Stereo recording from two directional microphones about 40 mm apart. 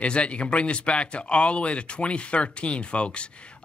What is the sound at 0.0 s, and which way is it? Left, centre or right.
Speech, left.